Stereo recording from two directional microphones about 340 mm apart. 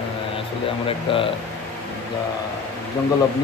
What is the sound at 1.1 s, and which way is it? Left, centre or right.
Speech, centre.